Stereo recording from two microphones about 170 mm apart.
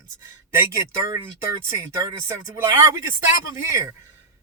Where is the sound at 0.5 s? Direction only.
15° right (ahead or behind).